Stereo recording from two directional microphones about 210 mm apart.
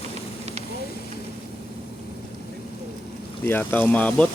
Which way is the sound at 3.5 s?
10° left (ahead or behind).